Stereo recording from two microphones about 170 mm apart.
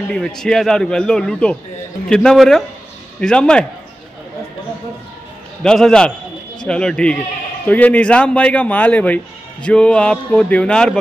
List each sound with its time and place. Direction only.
0.1 s a man's voice: 5° left (ahead or behind)
5.6 s a man's voice: 5° left (ahead or behind)